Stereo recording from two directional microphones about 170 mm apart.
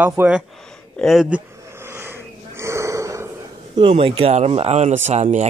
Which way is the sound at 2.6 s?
15° right (ahead or behind).